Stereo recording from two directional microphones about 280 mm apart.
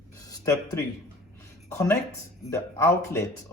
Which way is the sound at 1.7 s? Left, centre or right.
Centre.